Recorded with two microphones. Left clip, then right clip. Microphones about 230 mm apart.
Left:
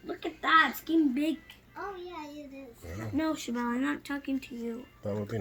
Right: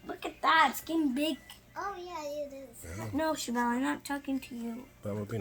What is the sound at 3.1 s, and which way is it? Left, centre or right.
Speech, centre.